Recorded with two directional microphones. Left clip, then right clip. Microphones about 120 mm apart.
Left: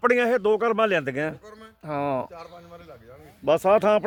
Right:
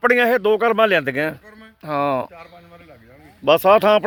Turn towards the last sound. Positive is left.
turn(degrees=-50)  # may be behind; listen again after turning